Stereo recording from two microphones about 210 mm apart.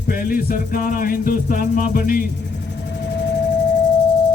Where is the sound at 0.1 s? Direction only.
45° left (ahead or behind).